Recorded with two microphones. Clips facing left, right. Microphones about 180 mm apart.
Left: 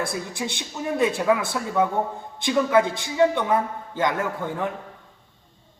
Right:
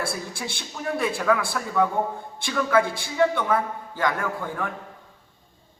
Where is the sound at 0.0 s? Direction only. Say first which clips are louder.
Left 2 dB; 20° left (ahead or behind).